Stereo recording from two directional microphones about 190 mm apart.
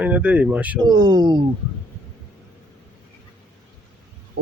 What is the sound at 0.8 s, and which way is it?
Speech, 25° right (ahead or behind).